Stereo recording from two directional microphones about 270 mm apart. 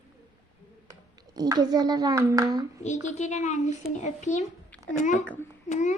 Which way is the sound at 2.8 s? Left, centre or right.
Left.